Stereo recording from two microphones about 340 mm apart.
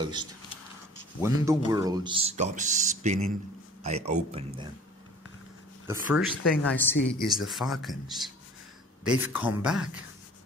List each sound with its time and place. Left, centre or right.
0.0 s speech: centre
5.9 s speech: centre